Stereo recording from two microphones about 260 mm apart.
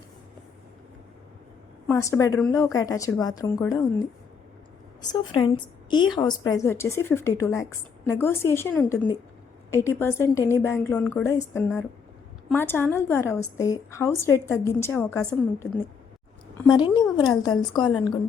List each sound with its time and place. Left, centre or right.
1.9 s a woman's voice: centre
5.1 s a woman's voice: centre
16.6 s a woman's voice: centre